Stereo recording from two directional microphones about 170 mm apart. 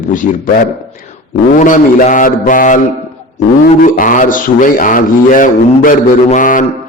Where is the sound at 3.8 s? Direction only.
50° left (ahead or behind).